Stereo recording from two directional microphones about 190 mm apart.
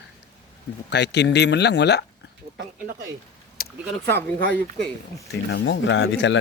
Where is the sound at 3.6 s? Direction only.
50° left (ahead or behind).